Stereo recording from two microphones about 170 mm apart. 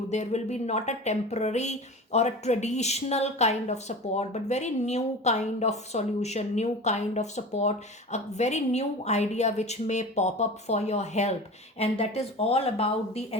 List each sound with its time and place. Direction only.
0.1 s speech: 40° left (ahead or behind)